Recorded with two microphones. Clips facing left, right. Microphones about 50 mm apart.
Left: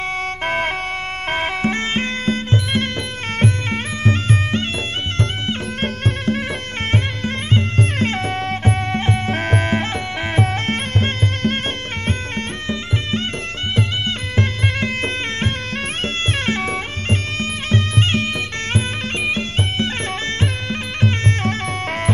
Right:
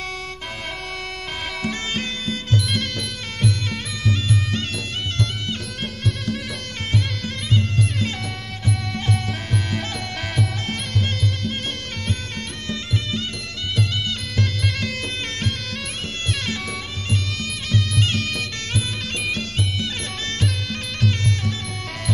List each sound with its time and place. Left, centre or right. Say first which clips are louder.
0.5 s wind instrument: left 13 dB; left
1.3 s music: left 8 dB; left
21.0 s music: left 4 dB; left